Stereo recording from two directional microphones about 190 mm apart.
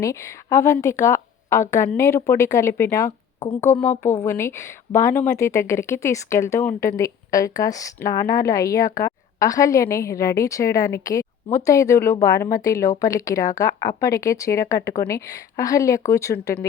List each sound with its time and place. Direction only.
0.0 s a woman's voice: 15° left (ahead or behind)